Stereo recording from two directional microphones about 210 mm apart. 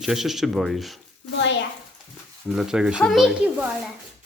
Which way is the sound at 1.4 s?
60° left (ahead or behind).